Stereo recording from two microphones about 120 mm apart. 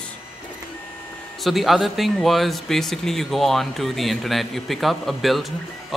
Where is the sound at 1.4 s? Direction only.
Centre (ahead or behind).